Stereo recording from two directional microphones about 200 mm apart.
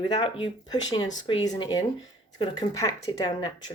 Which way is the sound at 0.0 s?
20° left (ahead or behind).